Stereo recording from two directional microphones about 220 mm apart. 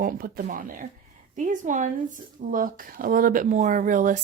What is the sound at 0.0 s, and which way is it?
Speech, 40° right (ahead or behind).